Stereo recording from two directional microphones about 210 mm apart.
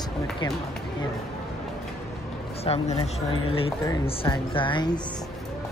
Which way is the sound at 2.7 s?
30° left (ahead or behind).